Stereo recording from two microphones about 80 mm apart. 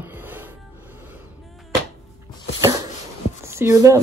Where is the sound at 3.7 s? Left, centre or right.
Right.